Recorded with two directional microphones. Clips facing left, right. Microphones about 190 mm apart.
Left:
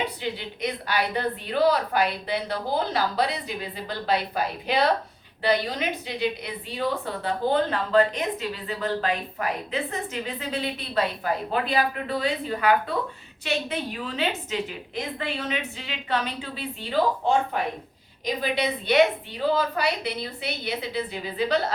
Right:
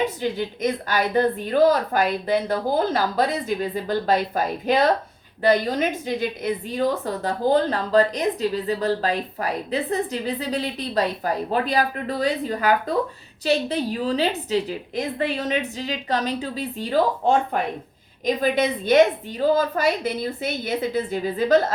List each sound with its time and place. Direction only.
0.0 s a woman's voice: 45° right (ahead or behind)
18.4 s a woman's voice: 45° right (ahead or behind)